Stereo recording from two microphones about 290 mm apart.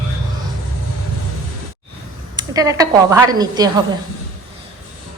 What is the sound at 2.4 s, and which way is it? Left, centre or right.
A woman's voice, centre.